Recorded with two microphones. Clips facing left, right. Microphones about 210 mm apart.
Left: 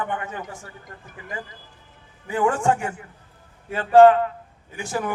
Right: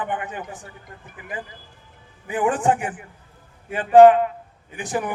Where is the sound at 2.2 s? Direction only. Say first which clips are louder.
Even; 20° right (ahead or behind).